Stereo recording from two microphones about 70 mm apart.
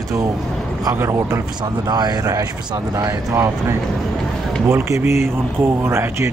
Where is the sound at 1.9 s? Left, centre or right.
Right.